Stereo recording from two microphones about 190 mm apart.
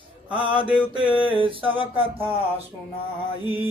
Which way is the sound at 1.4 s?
25° right (ahead or behind).